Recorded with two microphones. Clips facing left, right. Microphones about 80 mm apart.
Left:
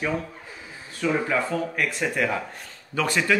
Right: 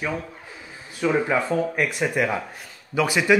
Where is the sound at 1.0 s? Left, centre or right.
Centre.